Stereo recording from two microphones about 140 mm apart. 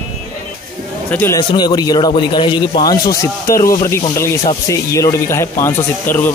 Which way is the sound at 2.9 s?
90° left.